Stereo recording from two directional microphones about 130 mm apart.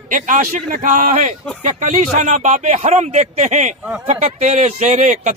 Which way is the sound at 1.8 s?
75° right (ahead or behind).